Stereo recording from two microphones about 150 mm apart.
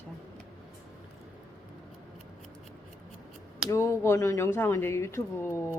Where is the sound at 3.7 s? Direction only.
20° left (ahead or behind).